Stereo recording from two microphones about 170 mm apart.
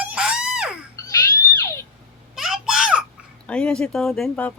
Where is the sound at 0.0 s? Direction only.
5° right (ahead or behind).